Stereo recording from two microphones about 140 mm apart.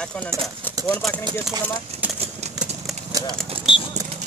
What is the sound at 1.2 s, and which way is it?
Speech, 30° right (ahead or behind).